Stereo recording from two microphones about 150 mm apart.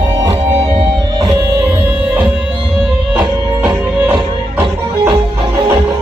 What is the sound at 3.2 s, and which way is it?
Music, 10° right (ahead or behind).